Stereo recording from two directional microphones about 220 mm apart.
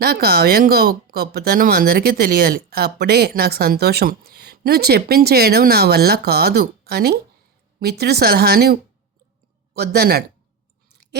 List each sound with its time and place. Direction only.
0.0 s speech: 45° right (ahead or behind)